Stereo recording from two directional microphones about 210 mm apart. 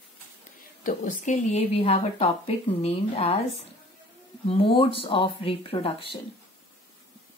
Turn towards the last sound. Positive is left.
turn(degrees=25)  # may be behind; listen again after turning